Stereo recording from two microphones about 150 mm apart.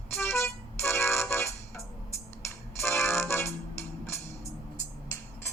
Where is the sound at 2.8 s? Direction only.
15° left (ahead or behind).